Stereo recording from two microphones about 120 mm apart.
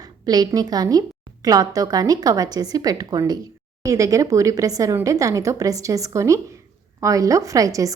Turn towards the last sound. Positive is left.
turn(degrees=-30)  # may be behind; listen again after turning